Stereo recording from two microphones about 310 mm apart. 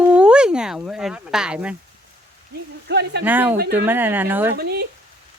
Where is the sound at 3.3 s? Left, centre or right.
Centre.